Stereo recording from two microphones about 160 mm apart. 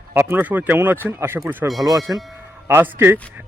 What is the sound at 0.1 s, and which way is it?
Speech, 15° right (ahead or behind).